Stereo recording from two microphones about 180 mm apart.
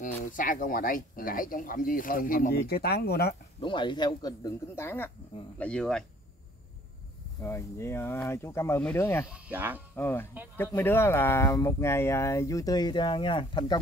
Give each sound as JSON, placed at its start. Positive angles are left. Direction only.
{"t": 0.0, "sound": "speech", "side_deg": 50}
{"t": 3.6, "sound": "speech", "side_deg": 25}
{"t": 7.4, "sound": "speech", "side_deg": 15}
{"t": 9.3, "sound": "speech", "side_deg": -10}
{"t": 9.9, "sound": "speech", "side_deg": 10}
{"t": 10.3, "sound": "speech", "side_deg": -10}
{"t": 10.6, "sound": "speech", "side_deg": 15}